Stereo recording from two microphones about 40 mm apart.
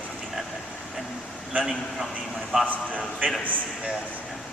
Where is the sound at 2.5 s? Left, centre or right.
Centre.